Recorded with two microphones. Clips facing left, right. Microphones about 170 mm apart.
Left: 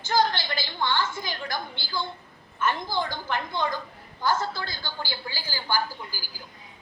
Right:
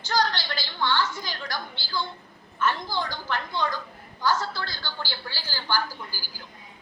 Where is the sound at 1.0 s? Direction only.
50° left (ahead or behind).